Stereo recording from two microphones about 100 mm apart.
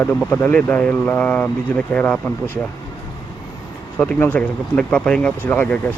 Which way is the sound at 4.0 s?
15° left (ahead or behind).